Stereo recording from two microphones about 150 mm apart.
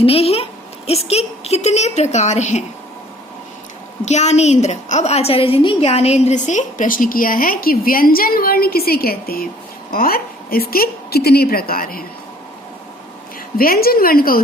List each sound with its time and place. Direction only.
0.0 s a woman's voice: 40° left (ahead or behind)
4.0 s a woman's voice: 50° left (ahead or behind); by 9.5 s 90° left
9.9 s a woman's voice: 80° left
13.6 s a woman's voice: 80° left